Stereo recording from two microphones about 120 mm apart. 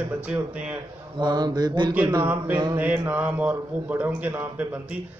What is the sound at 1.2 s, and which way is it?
Mantra, 35° right (ahead or behind).